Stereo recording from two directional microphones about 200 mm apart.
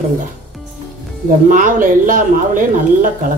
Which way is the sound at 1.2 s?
40° right (ahead or behind).